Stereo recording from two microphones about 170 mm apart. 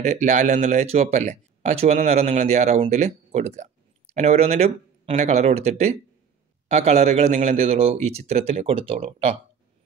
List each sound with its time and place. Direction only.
0.0 s speech: 45° right (ahead or behind)